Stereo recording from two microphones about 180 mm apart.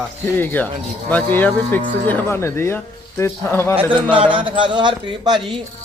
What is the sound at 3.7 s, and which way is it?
A man's voice, 30° right (ahead or behind).